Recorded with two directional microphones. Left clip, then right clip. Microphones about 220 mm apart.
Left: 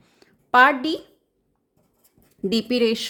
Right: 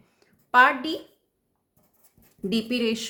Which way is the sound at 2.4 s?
35° left (ahead or behind).